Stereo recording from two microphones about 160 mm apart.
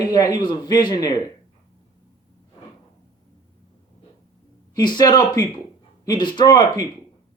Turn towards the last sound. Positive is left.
turn(degrees=25)  # may be behind; listen again after turning